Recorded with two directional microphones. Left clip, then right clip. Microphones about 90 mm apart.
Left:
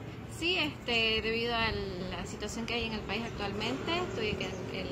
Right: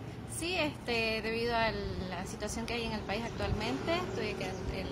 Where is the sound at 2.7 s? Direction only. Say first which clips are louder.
Left 2 dB; 40° right (ahead or behind).